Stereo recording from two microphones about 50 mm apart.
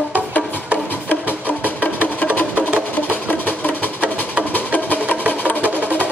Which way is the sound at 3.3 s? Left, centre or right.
Left.